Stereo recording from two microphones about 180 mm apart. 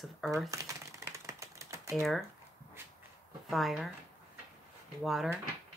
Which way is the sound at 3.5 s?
Centre (ahead or behind).